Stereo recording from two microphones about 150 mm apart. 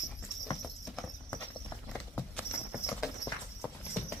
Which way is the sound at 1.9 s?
10° left (ahead or behind).